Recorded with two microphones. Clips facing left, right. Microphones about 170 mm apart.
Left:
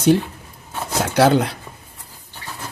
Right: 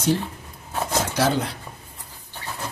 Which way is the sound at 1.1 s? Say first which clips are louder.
Left 9 dB; 70° left (ahead or behind).